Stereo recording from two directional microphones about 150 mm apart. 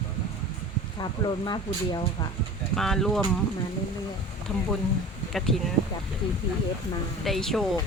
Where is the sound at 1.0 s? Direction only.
30° left (ahead or behind).